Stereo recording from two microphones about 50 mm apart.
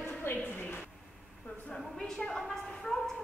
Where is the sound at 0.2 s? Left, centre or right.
Left.